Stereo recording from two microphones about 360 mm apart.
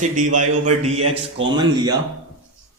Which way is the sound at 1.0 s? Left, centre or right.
Right.